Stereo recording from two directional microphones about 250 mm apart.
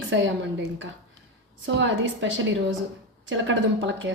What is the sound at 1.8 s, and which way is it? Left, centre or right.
Speech, right.